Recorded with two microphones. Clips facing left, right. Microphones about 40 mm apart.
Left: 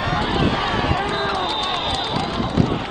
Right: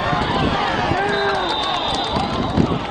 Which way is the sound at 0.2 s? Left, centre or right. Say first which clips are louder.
Right 1 dB; centre.